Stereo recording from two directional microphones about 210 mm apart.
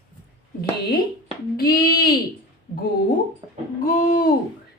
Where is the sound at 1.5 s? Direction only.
45° left (ahead or behind).